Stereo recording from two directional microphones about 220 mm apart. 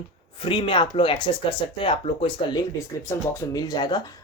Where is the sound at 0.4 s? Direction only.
25° left (ahead or behind).